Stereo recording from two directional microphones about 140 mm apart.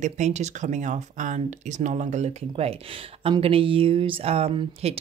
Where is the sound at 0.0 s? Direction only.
55° right (ahead or behind).